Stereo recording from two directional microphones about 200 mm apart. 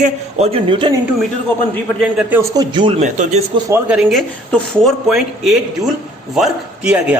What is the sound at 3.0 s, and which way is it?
Speech, 40° right (ahead or behind).